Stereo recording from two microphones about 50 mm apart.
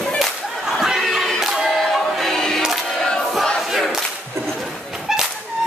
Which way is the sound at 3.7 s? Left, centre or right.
Centre.